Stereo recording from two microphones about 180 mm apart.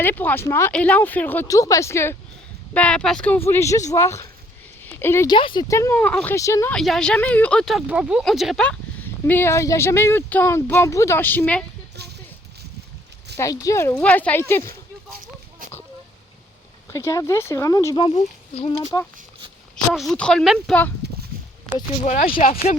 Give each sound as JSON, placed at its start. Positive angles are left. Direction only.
{"t": 0.0, "sound": "speech", "side_deg": 10}
{"t": 4.8, "sound": "a sound", "side_deg": 10}
{"t": 5.3, "sound": "speech", "side_deg": 25}
{"t": 6.7, "sound": "speech", "side_deg": 5}
{"t": 12.0, "sound": "a sound", "side_deg": -65}
{"t": 13.3, "sound": "speech", "side_deg": 15}
{"t": 16.9, "sound": "speech", "side_deg": 15}
{"t": 18.0, "sound": "speech", "side_deg": 30}
{"t": 19.7, "sound": "speech", "side_deg": 0}
{"t": 21.0, "sound": "a sound", "side_deg": -70}
{"t": 22.0, "sound": "speech", "side_deg": 45}